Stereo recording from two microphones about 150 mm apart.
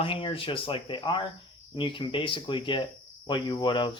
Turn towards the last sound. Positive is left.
turn(degrees=30)  # may be behind; listen again after turning